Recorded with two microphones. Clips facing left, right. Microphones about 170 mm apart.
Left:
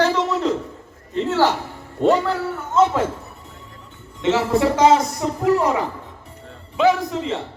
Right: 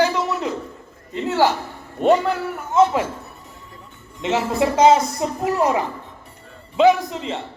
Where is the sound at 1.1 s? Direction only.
15° right (ahead or behind).